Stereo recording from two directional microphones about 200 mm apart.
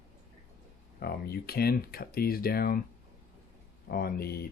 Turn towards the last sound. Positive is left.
turn(degrees=50)  # may be behind; listen again after turning